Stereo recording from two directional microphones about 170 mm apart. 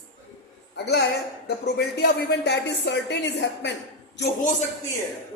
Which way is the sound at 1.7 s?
70° left (ahead or behind).